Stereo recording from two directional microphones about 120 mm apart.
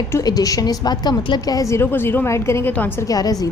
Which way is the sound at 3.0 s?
30° left (ahead or behind).